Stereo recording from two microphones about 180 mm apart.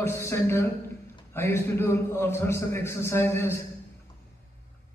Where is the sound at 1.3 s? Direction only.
15° left (ahead or behind).